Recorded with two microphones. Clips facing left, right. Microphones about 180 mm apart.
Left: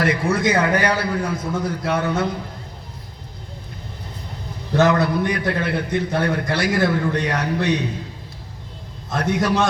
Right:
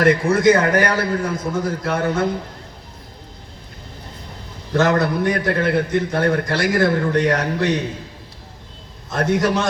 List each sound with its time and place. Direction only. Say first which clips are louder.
0.0 s a man's voice: right 5 dB; 55° right (ahead or behind)
4.7 s a man's voice: even; 55° right (ahead or behind)
9.1 s a man's voice: right 3 dB; 55° right (ahead or behind)